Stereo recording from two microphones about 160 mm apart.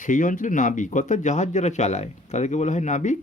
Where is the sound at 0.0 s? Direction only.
55° left (ahead or behind).